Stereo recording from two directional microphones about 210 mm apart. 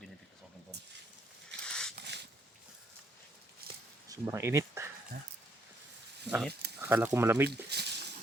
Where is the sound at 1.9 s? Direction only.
55° right (ahead or behind).